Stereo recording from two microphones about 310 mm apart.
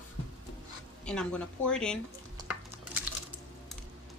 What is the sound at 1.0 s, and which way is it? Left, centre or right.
Speech, centre.